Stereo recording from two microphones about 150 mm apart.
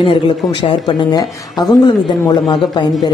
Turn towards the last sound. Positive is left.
turn(degrees=30)  # may be behind; listen again after turning